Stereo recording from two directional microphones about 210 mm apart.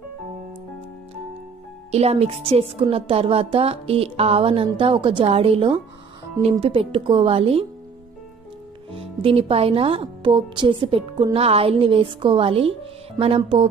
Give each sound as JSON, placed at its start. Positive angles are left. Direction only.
{"t": 1.9, "sound": "speech", "side_deg": -30}
{"t": 8.9, "sound": "speech", "side_deg": -25}